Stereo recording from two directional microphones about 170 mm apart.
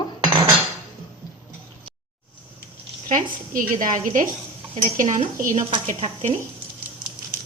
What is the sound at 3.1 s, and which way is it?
A woman's voice, 50° right (ahead or behind).